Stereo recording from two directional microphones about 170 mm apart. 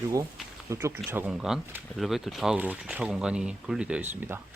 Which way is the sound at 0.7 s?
15° right (ahead or behind).